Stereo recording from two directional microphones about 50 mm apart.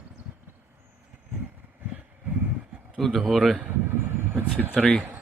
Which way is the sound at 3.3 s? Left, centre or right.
Centre.